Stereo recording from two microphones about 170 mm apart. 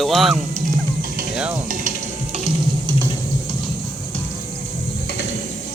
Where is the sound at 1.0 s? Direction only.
55° right (ahead or behind).